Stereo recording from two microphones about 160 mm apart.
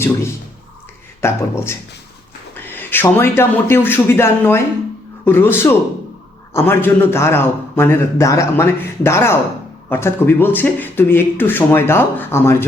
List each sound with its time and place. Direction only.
1.2 s a man's voice: 15° left (ahead or behind)